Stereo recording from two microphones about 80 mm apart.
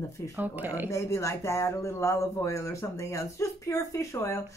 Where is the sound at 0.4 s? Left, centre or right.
Right.